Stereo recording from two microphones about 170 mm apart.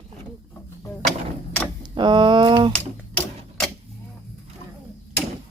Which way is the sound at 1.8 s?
25° right (ahead or behind).